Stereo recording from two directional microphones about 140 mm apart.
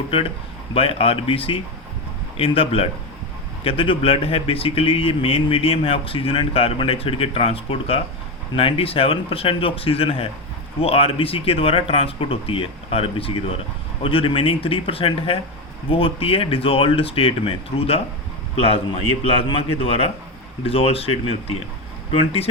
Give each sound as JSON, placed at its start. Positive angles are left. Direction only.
{"t": 0.7, "sound": "speech", "side_deg": 45}